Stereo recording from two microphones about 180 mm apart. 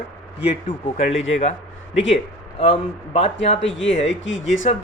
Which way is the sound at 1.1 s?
90° left.